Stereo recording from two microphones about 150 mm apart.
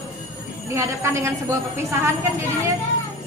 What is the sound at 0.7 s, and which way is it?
A woman's voice, 20° right (ahead or behind).